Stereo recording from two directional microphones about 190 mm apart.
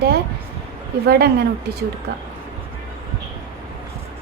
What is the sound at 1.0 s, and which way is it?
Speech, 55° right (ahead or behind).